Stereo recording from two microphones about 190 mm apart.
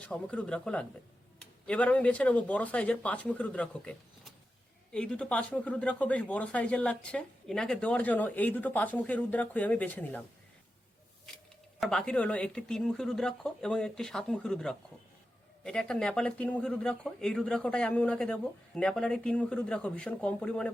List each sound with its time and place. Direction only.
0.0 s speech: 5° left (ahead or behind)
11.8 s speech: 5° left (ahead or behind)